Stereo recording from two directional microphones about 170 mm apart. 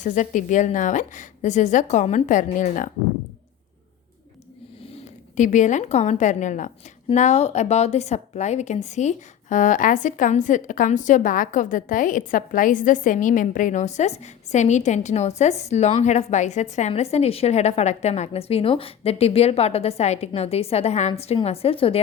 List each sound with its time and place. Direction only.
0.0 s a woman's voice: 45° left (ahead or behind)
5.4 s a woman's voice: 45° left (ahead or behind)